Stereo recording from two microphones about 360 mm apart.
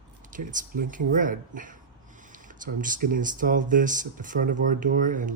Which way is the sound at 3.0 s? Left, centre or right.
Right.